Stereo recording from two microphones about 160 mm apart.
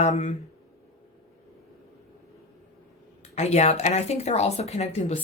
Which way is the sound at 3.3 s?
45° left (ahead or behind).